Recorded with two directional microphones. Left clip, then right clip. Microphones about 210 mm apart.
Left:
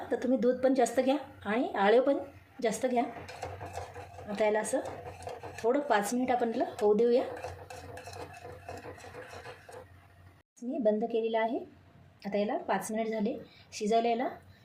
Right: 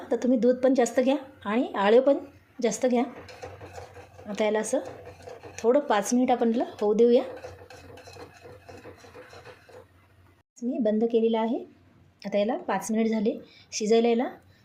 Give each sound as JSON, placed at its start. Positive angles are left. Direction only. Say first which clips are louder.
{"t": 0.1, "sound": "a woman's voice", "louder": "right 5 dB", "side_deg": -25}
{"t": 4.3, "sound": "a woman's voice", "louder": "right 3 dB", "side_deg": -30}
{"t": 10.8, "sound": "a woman's voice", "louder": "right 5 dB", "side_deg": -35}